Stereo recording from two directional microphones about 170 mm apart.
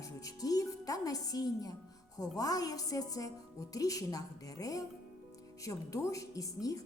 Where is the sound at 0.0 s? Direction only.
20° left (ahead or behind).